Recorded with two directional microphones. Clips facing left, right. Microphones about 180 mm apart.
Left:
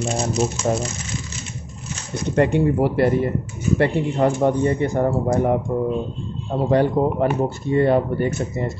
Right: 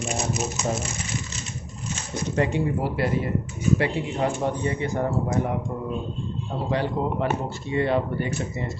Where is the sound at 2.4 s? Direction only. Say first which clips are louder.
Left 7 dB; 60° left (ahead or behind).